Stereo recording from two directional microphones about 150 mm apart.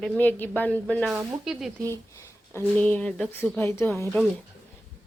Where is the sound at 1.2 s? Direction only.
5° right (ahead or behind).